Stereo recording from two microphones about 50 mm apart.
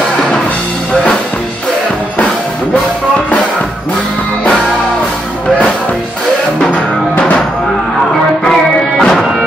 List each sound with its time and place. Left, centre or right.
6.7 s music: left
8.5 s music: centre